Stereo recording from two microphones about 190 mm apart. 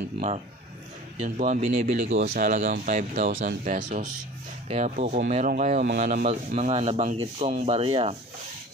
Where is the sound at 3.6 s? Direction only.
45° right (ahead or behind).